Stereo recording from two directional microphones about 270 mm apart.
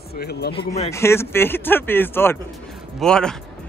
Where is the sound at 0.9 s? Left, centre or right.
Centre.